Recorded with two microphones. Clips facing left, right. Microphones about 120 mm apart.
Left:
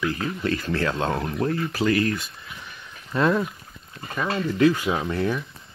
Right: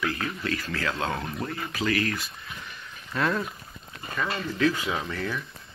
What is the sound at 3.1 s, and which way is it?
Speech, 20° left (ahead or behind).